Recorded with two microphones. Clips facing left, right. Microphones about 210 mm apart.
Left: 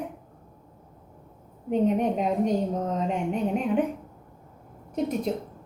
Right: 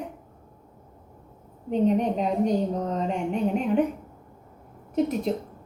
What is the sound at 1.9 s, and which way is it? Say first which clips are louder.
A woman's voice: right 1 dB; 5° left (ahead or behind).